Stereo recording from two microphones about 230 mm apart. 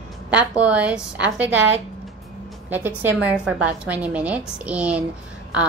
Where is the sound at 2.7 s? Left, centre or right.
Centre.